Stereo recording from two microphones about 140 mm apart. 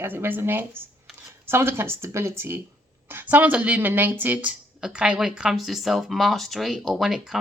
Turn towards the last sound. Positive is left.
turn(degrees=0)  # may be behind; listen again after turning